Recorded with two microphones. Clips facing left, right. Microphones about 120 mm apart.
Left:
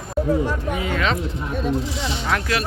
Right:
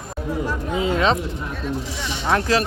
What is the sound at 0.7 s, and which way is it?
Speech, 25° right (ahead or behind).